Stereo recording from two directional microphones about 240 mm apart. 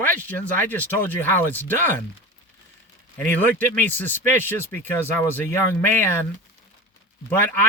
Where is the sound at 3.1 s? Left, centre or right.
Centre.